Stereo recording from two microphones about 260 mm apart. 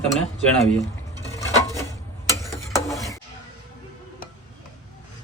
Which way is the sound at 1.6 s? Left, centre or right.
Centre.